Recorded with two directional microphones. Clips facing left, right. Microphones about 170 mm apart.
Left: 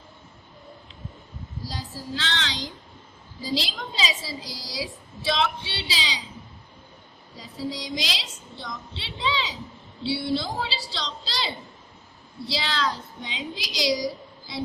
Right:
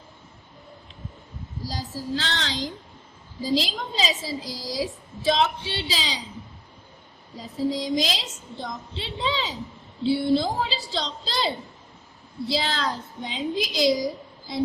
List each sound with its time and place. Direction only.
1.7 s child singing: 40° right (ahead or behind)
3.4 s a woman's voice: 40° right (ahead or behind)
7.3 s a woman's voice: 45° right (ahead or behind)